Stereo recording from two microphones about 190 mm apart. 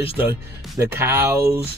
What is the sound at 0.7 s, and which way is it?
Speech, 15° right (ahead or behind).